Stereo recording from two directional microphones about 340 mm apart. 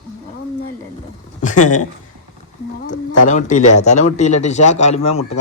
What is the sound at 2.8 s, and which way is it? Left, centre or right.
Speech, left.